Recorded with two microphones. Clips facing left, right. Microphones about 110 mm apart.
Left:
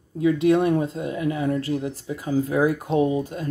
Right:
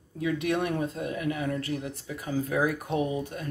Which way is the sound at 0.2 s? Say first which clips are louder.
Left 9 dB; 25° left (ahead or behind).